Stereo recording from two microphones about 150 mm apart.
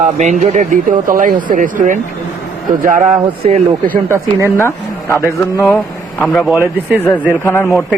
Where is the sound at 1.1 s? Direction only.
65° right (ahead or behind).